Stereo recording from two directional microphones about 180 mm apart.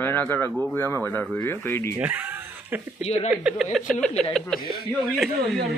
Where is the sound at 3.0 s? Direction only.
40° left (ahead or behind).